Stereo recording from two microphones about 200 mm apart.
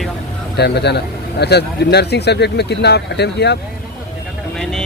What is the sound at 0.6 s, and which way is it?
Speech, 55° left (ahead or behind).